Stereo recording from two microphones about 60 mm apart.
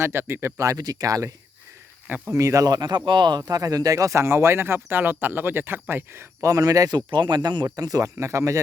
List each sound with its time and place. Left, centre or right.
0.0 s speech: right
2.0 s speech: right
2.3 s speech: right
6.4 s speech: right